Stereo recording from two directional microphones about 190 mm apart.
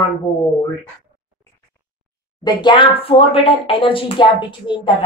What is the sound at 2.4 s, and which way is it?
Speech, 25° left (ahead or behind).